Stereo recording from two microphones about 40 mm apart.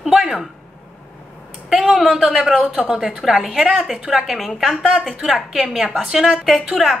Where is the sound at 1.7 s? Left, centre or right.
Centre.